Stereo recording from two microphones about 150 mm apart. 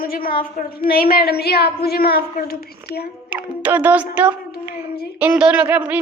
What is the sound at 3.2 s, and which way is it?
Speech, 10° right (ahead or behind).